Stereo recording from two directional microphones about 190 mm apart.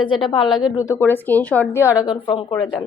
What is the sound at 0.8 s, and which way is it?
Speech, 10° left (ahead or behind).